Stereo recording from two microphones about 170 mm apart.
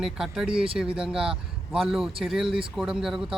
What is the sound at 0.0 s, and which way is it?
Speech, centre (ahead or behind).